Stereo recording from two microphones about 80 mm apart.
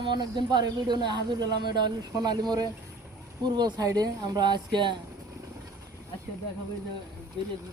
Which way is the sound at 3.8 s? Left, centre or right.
Right.